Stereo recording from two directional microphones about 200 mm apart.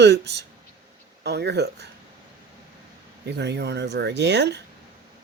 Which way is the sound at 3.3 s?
60° right (ahead or behind).